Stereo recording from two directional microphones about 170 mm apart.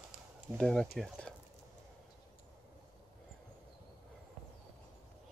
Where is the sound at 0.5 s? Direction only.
5° left (ahead or behind).